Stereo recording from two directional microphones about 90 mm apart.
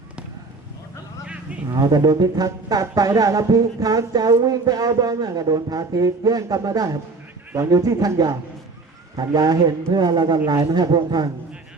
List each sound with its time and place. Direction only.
1.7 s speech: 45° right (ahead or behind)